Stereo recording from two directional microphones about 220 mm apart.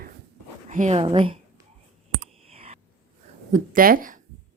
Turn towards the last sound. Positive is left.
turn(degrees=-40)  # may be behind; listen again after turning